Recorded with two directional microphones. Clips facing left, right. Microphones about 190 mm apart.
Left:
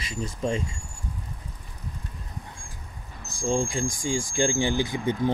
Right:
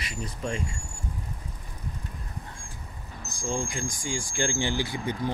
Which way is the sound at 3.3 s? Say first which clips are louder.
Left 5 dB; 25° left (ahead or behind).